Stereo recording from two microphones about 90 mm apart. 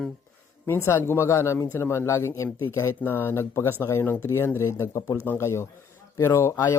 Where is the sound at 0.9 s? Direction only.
30° left (ahead or behind).